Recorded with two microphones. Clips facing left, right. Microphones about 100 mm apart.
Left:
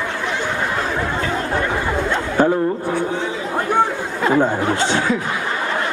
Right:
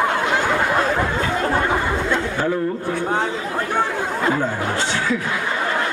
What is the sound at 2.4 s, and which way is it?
Speech, 30° left (ahead or behind).